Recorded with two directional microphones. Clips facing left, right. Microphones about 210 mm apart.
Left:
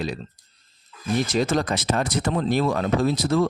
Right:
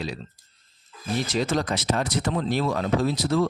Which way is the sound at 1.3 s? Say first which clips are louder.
Even; 45° left (ahead or behind).